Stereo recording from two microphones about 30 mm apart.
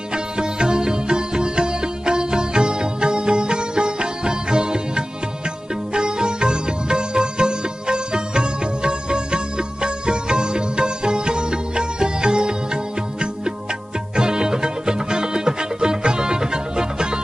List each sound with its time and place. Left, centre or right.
0.1 s music: right